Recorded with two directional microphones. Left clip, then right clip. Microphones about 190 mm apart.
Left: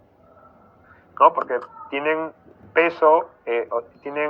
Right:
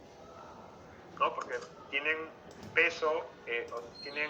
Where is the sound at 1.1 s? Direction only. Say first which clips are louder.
Left 16 dB; 30° left (ahead or behind).